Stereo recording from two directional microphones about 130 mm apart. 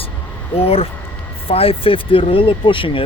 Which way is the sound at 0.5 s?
50° left (ahead or behind).